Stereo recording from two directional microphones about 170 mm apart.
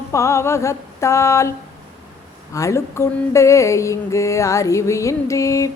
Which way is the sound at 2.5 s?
20° left (ahead or behind).